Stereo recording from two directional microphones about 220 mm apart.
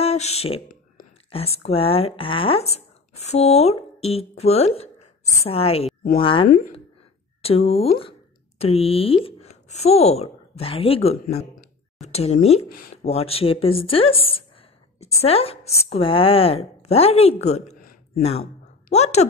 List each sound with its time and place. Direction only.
0.0 s speech: 30° left (ahead or behind)
12.6 s speech: 40° left (ahead or behind)
12.9 s a woman's voice: 25° left (ahead or behind)